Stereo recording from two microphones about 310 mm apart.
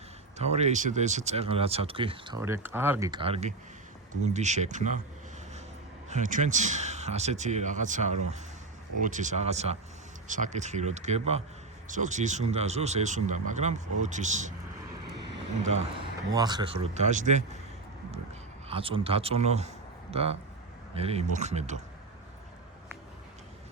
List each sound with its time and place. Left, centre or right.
0.3 s speech: right
6.1 s speech: right
16.3 s speech: centre
18.7 s speech: centre